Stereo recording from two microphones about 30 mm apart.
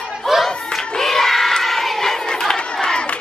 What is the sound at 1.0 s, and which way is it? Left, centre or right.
Child singing, centre.